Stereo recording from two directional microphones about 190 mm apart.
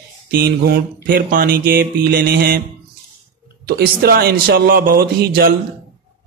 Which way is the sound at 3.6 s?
55° right (ahead or behind).